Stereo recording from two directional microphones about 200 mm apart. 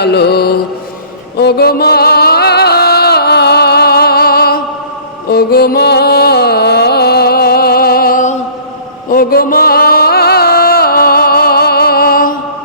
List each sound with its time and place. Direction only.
0.0 s mantra: 55° left (ahead or behind)
1.4 s music: 55° left (ahead or behind)